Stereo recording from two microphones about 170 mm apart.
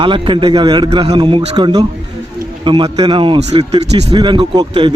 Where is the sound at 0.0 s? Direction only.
30° right (ahead or behind).